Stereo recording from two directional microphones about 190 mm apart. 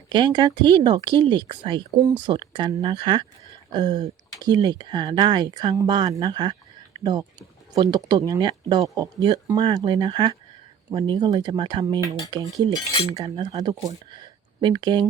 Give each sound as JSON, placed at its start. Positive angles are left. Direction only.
{"t": 0.1, "sound": "speech", "side_deg": -25}